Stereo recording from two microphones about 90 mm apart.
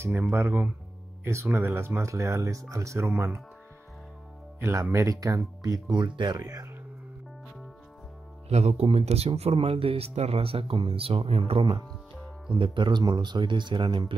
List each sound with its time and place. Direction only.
0.1 s speech: 20° right (ahead or behind)
4.6 s speech: 30° right (ahead or behind); by 6.3 s 60° right (ahead or behind)
6.3 s speech: 40° right (ahead or behind)
8.8 s speech: 90° right
12.5 s speech: 65° right (ahead or behind)